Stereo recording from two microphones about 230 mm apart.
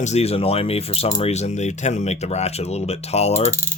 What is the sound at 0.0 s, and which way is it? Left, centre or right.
Speech, left.